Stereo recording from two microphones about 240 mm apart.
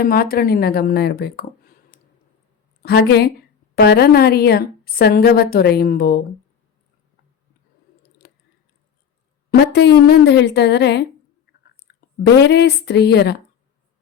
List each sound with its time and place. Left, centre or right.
0.0 s a woman's voice: left
2.8 s a woman's voice: left
9.5 s a woman's voice: left